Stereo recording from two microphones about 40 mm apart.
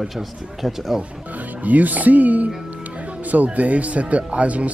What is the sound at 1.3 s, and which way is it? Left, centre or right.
Speech, right.